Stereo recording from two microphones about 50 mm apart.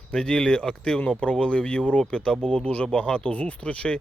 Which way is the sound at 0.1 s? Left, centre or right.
Centre.